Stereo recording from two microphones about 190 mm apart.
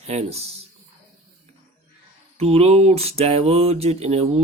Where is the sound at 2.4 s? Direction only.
30° right (ahead or behind).